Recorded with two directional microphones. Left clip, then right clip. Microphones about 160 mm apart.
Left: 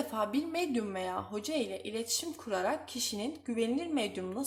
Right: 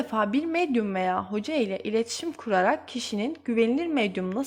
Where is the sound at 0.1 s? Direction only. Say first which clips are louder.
Right 8 dB; 30° right (ahead or behind).